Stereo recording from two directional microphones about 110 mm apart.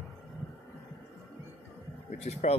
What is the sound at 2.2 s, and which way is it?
Speech, 85° left.